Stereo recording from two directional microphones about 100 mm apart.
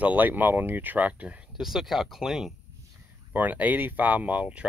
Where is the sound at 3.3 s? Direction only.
15° right (ahead or behind).